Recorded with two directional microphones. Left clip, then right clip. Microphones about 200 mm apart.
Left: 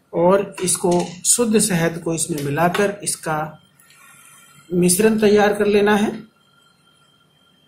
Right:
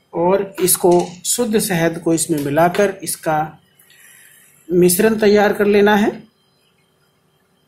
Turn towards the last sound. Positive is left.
turn(degrees=-25)  # may be behind; listen again after turning